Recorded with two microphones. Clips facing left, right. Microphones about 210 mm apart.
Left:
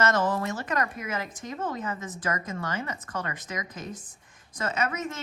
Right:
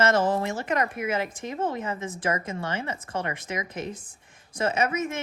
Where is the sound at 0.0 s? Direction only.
30° right (ahead or behind).